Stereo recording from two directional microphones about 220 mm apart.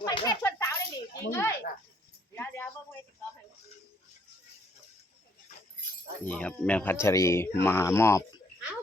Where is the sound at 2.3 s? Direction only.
10° left (ahead or behind).